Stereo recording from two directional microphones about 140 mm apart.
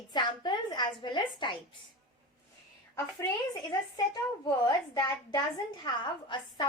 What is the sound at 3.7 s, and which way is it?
A woman's voice, 30° left (ahead or behind).